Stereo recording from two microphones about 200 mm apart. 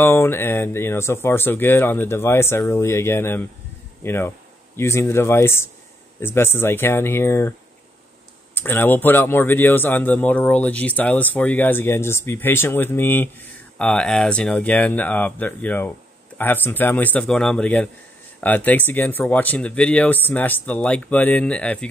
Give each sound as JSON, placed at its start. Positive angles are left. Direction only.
{"t": 0.0, "sound": "speech", "side_deg": 10}
{"t": 8.5, "sound": "speech", "side_deg": 10}